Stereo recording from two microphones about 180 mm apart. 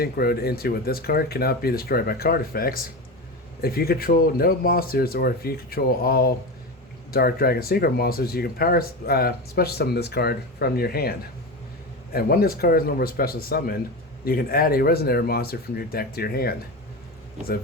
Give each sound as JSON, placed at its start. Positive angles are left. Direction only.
{"t": 0.0, "sound": "speech", "side_deg": 60}
{"t": 12.1, "sound": "speech", "side_deg": 55}